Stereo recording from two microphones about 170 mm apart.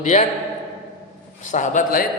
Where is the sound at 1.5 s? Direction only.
50° left (ahead or behind).